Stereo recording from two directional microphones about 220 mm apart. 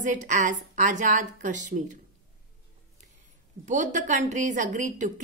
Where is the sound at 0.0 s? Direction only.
35° right (ahead or behind).